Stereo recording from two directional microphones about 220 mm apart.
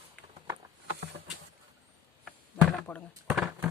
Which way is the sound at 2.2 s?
5° left (ahead or behind).